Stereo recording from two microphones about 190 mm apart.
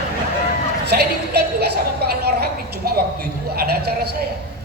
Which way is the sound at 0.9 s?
60° right (ahead or behind).